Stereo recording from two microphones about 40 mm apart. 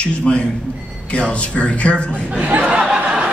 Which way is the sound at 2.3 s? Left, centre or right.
Right.